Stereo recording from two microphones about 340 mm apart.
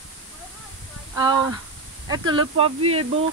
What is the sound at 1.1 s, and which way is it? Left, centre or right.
Speech, centre.